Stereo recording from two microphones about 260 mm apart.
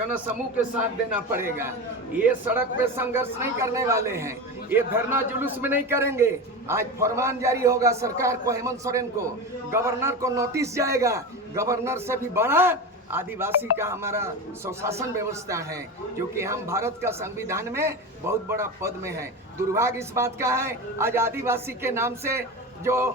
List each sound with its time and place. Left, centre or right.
1.1 s a man's voice: centre